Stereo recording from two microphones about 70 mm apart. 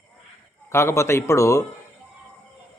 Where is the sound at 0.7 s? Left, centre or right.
Left.